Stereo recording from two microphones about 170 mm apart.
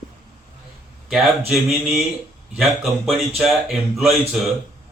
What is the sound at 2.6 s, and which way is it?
A man's voice, centre (ahead or behind).